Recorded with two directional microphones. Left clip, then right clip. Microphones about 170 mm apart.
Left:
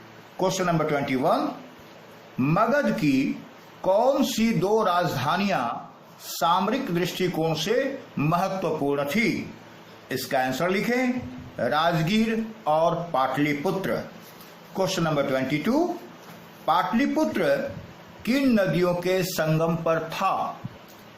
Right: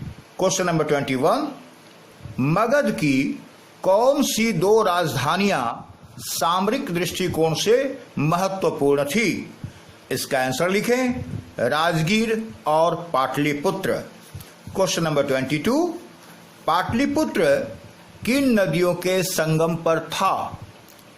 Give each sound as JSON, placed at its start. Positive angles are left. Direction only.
{"t": 0.3, "sound": "speech", "side_deg": -65}
{"t": 2.4, "sound": "speech", "side_deg": -60}